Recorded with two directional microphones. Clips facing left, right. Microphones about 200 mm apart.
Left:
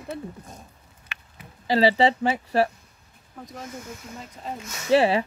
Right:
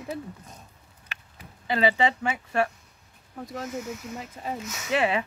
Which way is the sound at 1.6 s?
35° left (ahead or behind).